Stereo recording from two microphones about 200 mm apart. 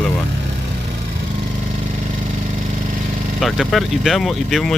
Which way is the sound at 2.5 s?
40° right (ahead or behind).